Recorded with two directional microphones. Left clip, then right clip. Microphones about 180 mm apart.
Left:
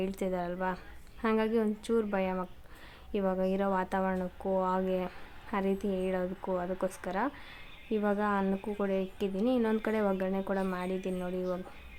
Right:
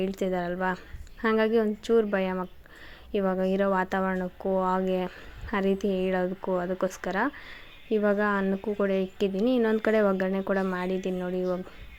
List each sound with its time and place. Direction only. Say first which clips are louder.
0.0 s speech: right 5 dB; 15° right (ahead or behind)